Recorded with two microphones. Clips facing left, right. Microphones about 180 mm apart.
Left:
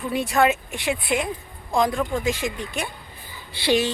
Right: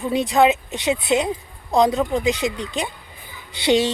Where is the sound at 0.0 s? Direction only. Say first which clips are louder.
Right 4 dB; 20° right (ahead or behind).